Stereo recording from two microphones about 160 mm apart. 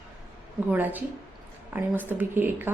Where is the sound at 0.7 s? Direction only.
10° right (ahead or behind).